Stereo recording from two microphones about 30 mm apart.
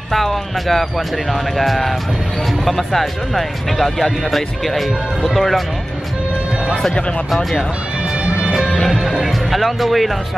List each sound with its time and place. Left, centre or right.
0.1 s speech: centre
9.2 s speech: centre